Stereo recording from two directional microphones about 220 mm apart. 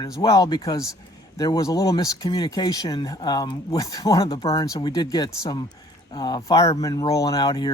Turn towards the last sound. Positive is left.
turn(degrees=20)  # may be behind; listen again after turning